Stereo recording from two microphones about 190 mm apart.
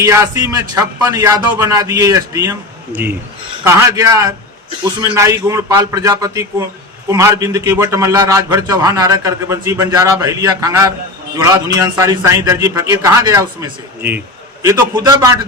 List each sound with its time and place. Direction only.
0.0 s a man's voice: 15° right (ahead or behind)